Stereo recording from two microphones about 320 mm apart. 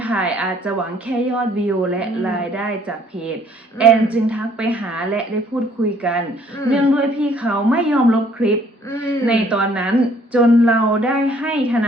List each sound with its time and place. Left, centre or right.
0.0 s a woman's voice: centre
3.8 s a woman's voice: centre